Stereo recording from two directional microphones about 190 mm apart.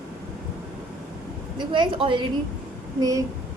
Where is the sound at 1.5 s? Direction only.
25° right (ahead or behind).